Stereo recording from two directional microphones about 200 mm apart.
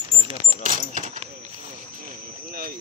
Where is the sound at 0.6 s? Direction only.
40° right (ahead or behind).